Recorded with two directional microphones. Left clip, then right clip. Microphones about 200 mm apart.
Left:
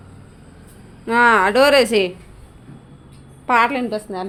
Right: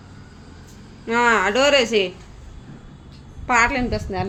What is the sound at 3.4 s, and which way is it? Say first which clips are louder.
Speech: left 2 dB; 15° left (ahead or behind).